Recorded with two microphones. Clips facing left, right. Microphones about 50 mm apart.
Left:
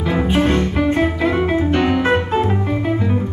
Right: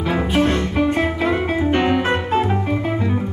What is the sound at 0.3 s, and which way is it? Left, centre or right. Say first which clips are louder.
Music: left 2 dB; left.